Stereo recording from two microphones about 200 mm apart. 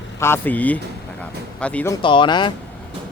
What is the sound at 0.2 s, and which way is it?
Speech, 10° left (ahead or behind).